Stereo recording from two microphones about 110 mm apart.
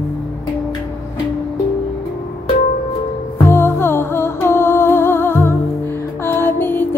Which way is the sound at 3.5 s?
20° left (ahead or behind).